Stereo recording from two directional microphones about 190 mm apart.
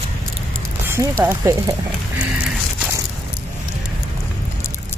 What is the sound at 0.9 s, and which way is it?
Speech, 15° right (ahead or behind).